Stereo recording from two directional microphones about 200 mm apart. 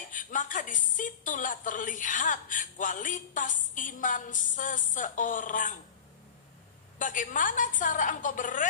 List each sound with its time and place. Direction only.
0.1 s a woman's voice: 40° left (ahead or behind)
7.0 s a woman's voice: 40° left (ahead or behind)